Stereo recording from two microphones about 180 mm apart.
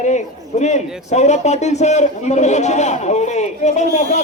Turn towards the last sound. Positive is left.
turn(degrees=40)  # may be behind; listen again after turning